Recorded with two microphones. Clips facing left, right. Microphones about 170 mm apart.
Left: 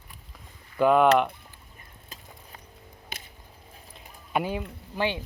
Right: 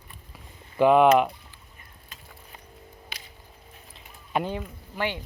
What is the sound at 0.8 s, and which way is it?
Speech, 5° right (ahead or behind).